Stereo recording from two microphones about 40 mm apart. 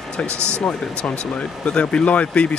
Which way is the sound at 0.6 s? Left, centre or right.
Left.